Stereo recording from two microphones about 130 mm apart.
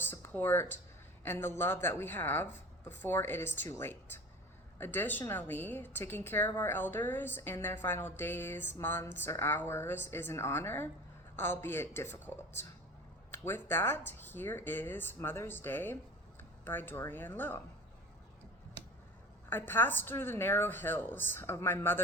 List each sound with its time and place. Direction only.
0.0 s a sound: 15° left (ahead or behind)
1.2 s a man's voice: 15° left (ahead or behind)
19.5 s a woman's voice: 15° left (ahead or behind)